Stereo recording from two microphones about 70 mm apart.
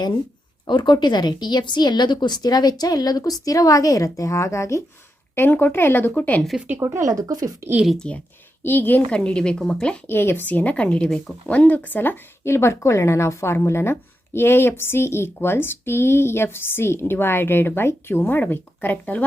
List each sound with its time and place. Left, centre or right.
0.7 s a woman's voice: left
5.3 s speech: left
6.7 s speech: right
7.1 s speech: right
7.9 s speech: centre
8.6 s speech: left
9.1 s speech: centre
10.1 s speech: left